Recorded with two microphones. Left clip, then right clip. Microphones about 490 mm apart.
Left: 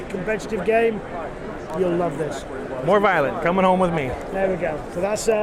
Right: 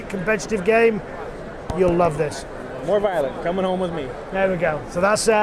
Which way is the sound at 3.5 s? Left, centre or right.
Left.